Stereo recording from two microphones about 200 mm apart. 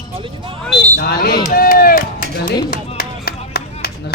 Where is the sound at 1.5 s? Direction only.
45° left (ahead or behind).